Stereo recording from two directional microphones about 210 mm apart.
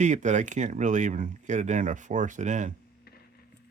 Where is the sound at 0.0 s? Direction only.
35° right (ahead or behind).